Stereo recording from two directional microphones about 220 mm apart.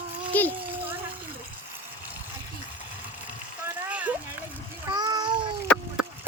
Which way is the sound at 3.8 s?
5° right (ahead or behind).